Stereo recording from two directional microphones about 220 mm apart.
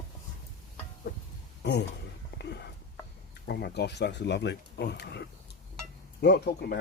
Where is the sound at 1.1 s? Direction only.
45° left (ahead or behind).